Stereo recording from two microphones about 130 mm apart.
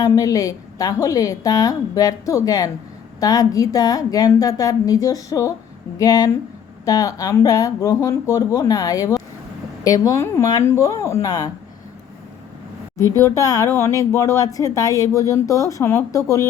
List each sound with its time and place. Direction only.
0.0 s speech: 25° left (ahead or behind)
13.0 s speech: 25° left (ahead or behind)